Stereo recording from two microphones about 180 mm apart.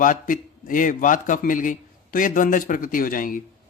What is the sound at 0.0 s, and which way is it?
A man's voice, 45° left (ahead or behind).